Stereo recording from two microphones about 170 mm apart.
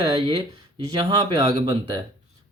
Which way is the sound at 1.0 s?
25° right (ahead or behind).